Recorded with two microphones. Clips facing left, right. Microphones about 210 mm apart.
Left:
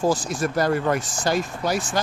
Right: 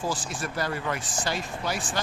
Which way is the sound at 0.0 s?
45° left (ahead or behind).